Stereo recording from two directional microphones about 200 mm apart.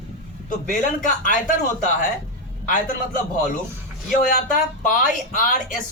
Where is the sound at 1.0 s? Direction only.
40° left (ahead or behind).